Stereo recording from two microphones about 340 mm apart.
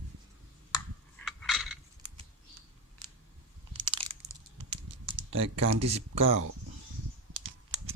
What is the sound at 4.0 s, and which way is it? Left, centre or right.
Crushing, right.